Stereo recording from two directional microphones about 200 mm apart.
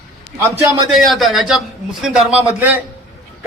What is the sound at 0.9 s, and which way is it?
A man's voice, centre (ahead or behind).